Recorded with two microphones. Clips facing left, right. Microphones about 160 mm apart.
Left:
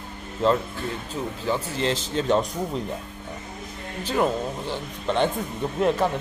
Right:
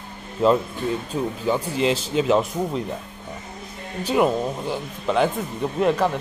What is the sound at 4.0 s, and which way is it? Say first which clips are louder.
Speech: right 4 dB; 10° right (ahead or behind).